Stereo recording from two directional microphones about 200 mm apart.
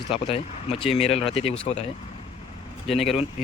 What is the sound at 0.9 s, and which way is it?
Speech, 30° left (ahead or behind).